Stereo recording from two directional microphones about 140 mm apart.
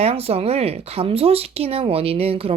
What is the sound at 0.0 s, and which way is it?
Speech, 45° right (ahead or behind).